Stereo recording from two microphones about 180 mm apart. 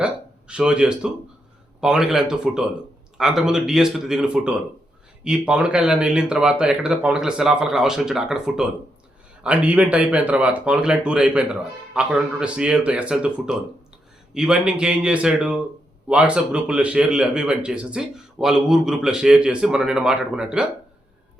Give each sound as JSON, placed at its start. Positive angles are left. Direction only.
{"t": 0.0, "sound": "a man's voice", "side_deg": -5}